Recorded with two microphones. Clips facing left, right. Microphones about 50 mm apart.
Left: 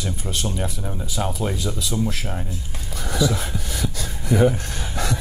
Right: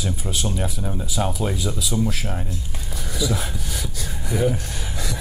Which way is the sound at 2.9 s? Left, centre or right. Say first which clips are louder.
Left 5 dB; left.